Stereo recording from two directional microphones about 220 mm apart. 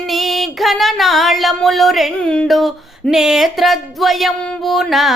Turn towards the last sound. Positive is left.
turn(degrees=0)  # may be behind; listen again after turning